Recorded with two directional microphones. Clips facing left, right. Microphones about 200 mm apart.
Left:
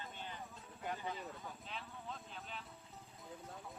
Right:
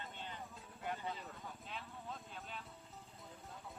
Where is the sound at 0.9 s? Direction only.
5° left (ahead or behind).